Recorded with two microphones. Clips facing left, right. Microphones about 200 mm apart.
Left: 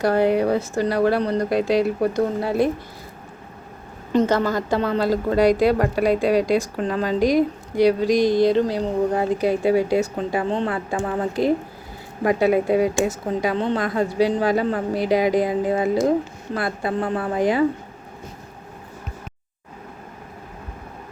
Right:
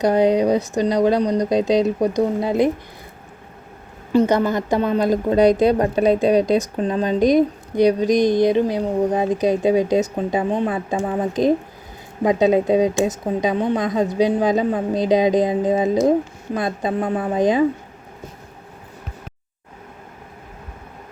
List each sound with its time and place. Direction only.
0.0 s speech: 15° right (ahead or behind)
4.1 s speech: 10° right (ahead or behind)